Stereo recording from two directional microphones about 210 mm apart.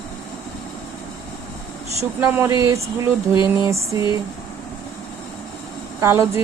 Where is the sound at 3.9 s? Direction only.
15° right (ahead or behind).